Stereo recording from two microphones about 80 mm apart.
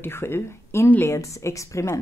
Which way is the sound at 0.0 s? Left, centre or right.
Left.